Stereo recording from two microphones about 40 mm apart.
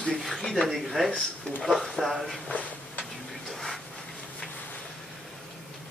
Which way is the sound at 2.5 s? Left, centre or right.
Left.